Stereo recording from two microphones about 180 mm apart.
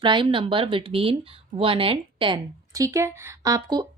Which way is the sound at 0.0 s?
25° right (ahead or behind).